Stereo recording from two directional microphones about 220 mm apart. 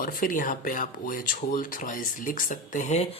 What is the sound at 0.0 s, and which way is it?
Speech, 40° left (ahead or behind).